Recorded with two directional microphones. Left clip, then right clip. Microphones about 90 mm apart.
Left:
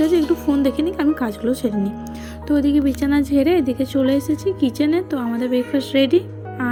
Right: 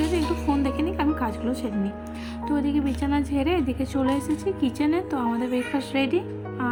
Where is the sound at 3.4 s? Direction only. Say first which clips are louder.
Left 7 dB; 25° left (ahead or behind).